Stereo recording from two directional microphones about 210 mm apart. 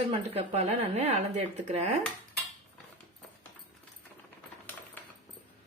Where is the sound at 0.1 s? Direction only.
30° right (ahead or behind).